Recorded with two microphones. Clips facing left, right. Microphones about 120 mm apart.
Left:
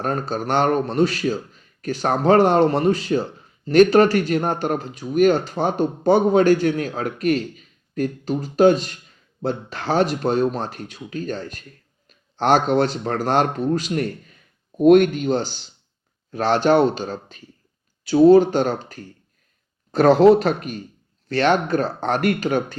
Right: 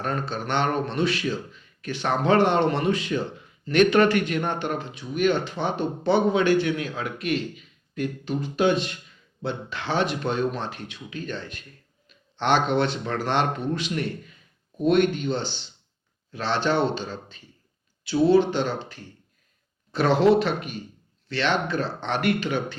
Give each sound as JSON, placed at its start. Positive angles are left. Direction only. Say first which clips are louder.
{"t": 0.0, "sound": "a man's voice", "louder": "left 5 dB", "side_deg": 40}